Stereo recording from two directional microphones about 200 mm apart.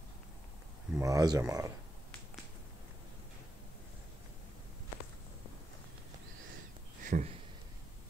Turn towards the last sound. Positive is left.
turn(degrees=-40)  # may be behind; listen again after turning